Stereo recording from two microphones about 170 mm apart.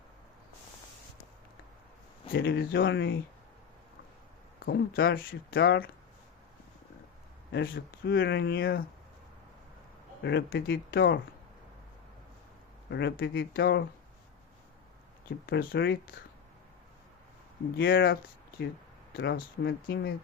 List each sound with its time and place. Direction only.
2.3 s speech: 90° left
4.6 s speech: 65° left (ahead or behind)
7.5 s speech: 70° left (ahead or behind)
10.2 s speech: 75° left (ahead or behind)
12.9 s speech: 90° left; by 13.8 s 70° left (ahead or behind)
15.4 s speech: 70° left (ahead or behind)
17.7 s speech: 65° left (ahead or behind)